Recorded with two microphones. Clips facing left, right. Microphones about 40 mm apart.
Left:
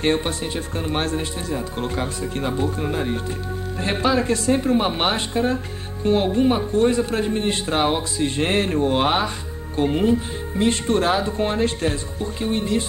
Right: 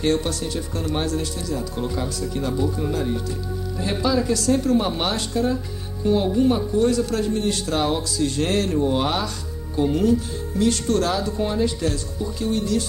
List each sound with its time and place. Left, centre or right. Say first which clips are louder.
0.0 s speech: left 1 dB; left